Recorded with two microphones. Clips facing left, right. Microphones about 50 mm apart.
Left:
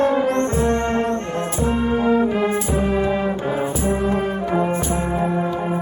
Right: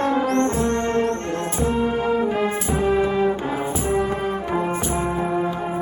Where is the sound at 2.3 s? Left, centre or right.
Centre.